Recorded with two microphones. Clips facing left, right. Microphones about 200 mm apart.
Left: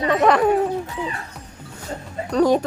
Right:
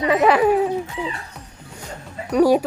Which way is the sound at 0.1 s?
5° right (ahead or behind).